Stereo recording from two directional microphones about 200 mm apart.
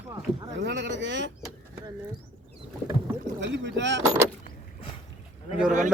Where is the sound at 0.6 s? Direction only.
60° right (ahead or behind).